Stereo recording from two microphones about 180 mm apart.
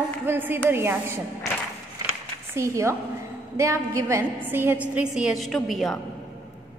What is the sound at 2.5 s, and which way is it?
A woman's voice, 15° right (ahead or behind).